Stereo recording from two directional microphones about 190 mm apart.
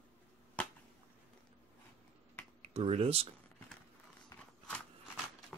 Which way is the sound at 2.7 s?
30° right (ahead or behind).